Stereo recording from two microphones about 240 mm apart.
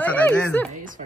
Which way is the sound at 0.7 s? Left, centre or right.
Right.